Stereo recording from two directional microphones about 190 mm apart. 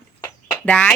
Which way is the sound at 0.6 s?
5° left (ahead or behind).